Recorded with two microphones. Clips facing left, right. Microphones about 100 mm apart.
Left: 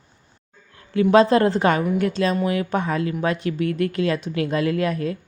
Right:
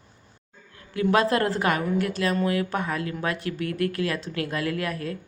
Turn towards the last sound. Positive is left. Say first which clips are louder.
# left 6 dB
turn(degrees=25)  # may be behind; listen again after turning